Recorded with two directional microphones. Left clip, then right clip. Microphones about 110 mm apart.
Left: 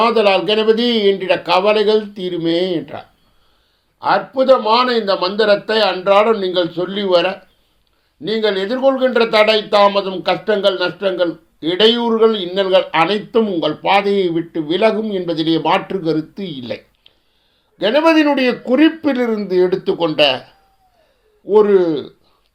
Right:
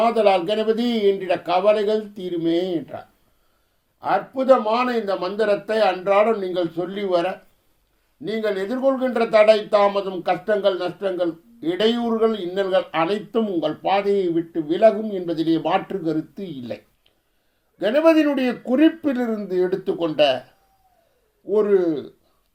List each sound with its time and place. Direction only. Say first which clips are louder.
0.0 s speech: left 4 dB; 20° left (ahead or behind)
21.5 s speech: left 7 dB; 25° left (ahead or behind)